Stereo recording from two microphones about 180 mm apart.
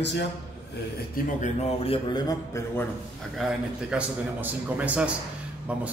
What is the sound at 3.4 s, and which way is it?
Speech, 5° right (ahead or behind).